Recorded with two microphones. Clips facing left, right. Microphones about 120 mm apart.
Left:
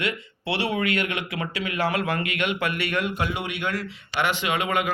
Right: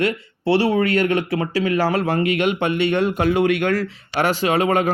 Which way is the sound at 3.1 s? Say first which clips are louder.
Right 11 dB; 45° right (ahead or behind).